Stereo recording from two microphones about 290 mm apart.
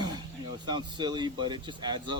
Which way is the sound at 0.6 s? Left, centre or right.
Centre.